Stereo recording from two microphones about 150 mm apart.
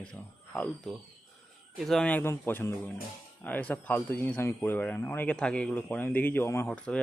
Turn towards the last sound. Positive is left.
turn(degrees=5)  # may be behind; listen again after turning